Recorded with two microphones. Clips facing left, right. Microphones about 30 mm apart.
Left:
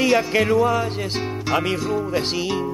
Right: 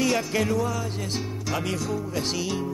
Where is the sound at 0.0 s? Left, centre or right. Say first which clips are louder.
Left 6 dB; left.